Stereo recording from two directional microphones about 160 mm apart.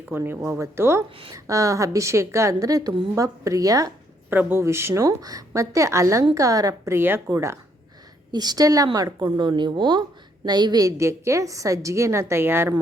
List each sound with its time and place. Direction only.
0.1 s a woman's voice: 15° right (ahead or behind)